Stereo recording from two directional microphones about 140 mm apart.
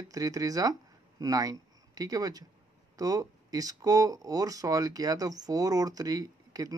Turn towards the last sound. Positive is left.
turn(degrees=-25)  # may be behind; listen again after turning